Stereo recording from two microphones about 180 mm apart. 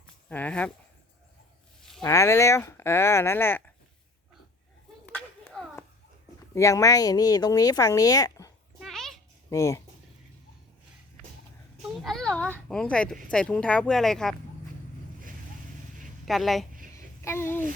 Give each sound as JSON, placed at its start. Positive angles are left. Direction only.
{"t": 0.3, "sound": "speech", "side_deg": 10}
{"t": 1.8, "sound": "a sound", "side_deg": 0}
{"t": 2.0, "sound": "speech", "side_deg": 15}
{"t": 5.0, "sound": "a sound", "side_deg": 5}
{"t": 6.5, "sound": "speech", "side_deg": 15}
{"t": 8.8, "sound": "a sound", "side_deg": 0}
{"t": 9.5, "sound": "speech", "side_deg": 15}
{"t": 11.8, "sound": "a child's voice", "side_deg": 0}
{"t": 16.2, "sound": "speech", "side_deg": 0}
{"t": 17.2, "sound": "speech", "side_deg": 15}